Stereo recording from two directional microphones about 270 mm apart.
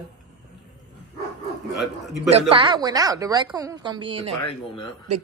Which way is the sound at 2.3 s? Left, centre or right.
Right.